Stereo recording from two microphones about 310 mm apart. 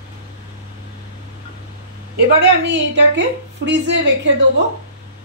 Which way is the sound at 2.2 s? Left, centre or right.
Right.